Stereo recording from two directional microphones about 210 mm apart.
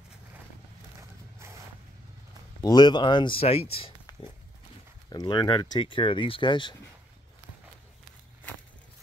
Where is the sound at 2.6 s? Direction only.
20° left (ahead or behind).